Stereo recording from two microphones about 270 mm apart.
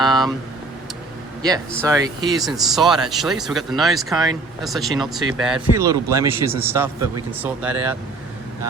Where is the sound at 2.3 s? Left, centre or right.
Centre.